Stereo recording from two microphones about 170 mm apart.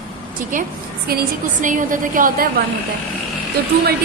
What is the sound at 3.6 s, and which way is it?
Speech, 75° right (ahead or behind).